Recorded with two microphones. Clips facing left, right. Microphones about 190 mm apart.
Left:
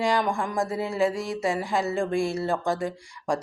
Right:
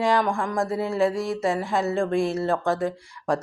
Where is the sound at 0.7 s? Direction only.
Centre (ahead or behind).